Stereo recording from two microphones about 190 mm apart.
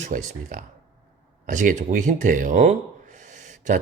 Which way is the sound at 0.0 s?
40° right (ahead or behind).